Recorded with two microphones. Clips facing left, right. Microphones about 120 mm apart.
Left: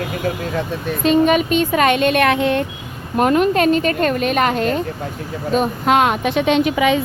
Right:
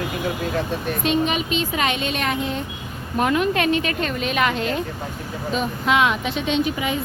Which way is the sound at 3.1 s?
45° left (ahead or behind).